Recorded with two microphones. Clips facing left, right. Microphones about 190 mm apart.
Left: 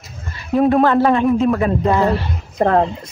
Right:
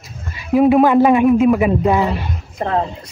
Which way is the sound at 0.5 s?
5° right (ahead or behind).